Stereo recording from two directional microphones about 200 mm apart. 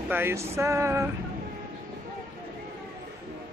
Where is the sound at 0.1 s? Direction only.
10° right (ahead or behind).